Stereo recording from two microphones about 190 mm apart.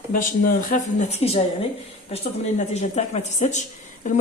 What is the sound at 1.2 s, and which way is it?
A man's voice, 30° left (ahead or behind).